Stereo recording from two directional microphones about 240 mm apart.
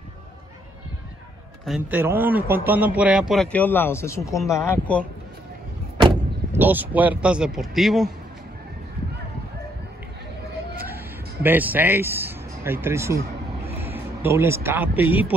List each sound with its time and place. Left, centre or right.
1.7 s a man's voice: centre
5.9 s vehicle: centre
6.6 s a man's voice: centre
11.4 s speech: centre